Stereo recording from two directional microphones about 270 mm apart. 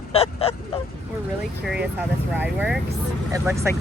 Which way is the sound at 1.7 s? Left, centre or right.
Centre.